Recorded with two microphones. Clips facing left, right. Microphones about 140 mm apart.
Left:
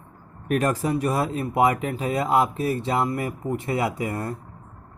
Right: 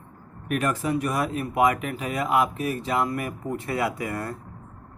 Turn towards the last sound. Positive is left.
turn(degrees=20)  # may be behind; listen again after turning